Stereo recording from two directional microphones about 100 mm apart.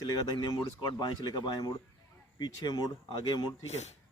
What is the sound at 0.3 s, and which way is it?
A man's voice, 45° left (ahead or behind).